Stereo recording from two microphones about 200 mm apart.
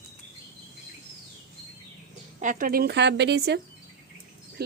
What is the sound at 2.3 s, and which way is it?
Speech, 40° right (ahead or behind).